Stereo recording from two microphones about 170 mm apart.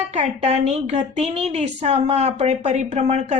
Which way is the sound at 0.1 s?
40° right (ahead or behind).